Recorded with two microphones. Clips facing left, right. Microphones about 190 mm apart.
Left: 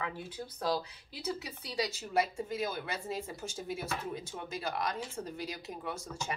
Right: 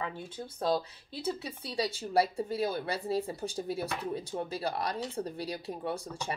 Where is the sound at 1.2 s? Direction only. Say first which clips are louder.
Right 3 dB; 30° right (ahead or behind).